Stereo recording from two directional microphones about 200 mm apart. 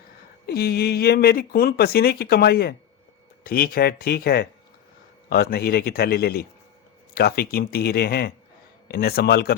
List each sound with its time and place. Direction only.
0.4 s speech: 50° left (ahead or behind)